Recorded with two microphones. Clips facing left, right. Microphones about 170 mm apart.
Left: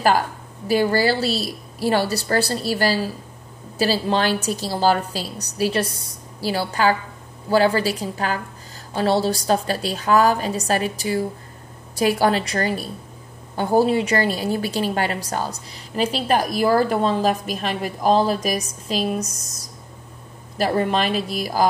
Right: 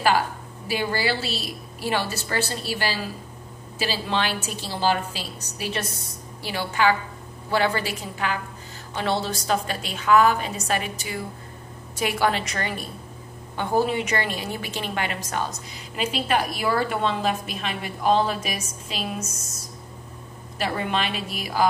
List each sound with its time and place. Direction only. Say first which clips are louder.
0.7 s a woman's voice: left 7 dB; 40° left (ahead or behind)